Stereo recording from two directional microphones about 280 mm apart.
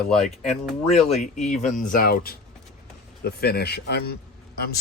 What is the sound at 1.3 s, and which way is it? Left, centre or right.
Speech, left.